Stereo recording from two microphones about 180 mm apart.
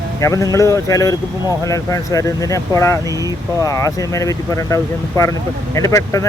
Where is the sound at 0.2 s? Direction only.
15° left (ahead or behind).